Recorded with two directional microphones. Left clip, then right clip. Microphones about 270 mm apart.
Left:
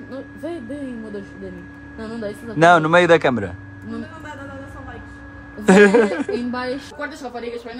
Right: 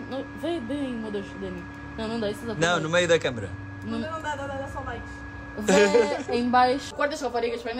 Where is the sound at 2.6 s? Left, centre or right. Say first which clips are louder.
Left 11 dB; left.